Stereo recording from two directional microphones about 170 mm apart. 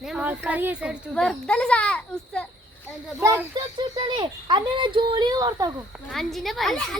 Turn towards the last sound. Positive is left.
turn(degrees=5)  # may be behind; listen again after turning